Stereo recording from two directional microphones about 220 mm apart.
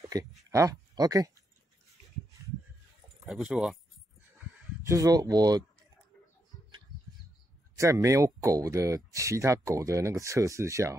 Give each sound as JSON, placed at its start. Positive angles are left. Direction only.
{"t": 0.1, "sound": "speech", "side_deg": -15}
{"t": 3.3, "sound": "speech", "side_deg": 0}
{"t": 4.8, "sound": "speech", "side_deg": -15}
{"t": 7.7, "sound": "speech", "side_deg": -15}